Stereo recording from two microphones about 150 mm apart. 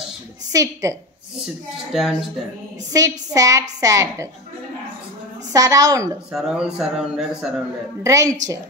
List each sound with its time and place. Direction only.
0.5 s a woman's voice: 20° right (ahead or behind)
1.9 s speech: centre (ahead or behind)
2.9 s a woman's voice: 20° right (ahead or behind)
5.5 s a woman's voice: 20° right (ahead or behind)
6.3 s speech: 5° right (ahead or behind)
8.0 s a woman's voice: 20° right (ahead or behind)